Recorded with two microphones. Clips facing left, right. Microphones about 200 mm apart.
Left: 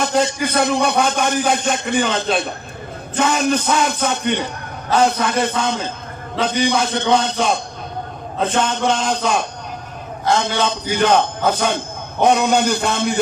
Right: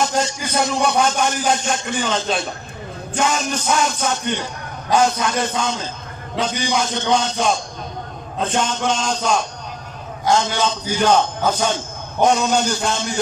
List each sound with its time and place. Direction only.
0.0 s speech: 60° left (ahead or behind)
8.6 s speech: 60° left (ahead or behind)